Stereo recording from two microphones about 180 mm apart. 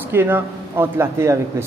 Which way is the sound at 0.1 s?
10° right (ahead or behind).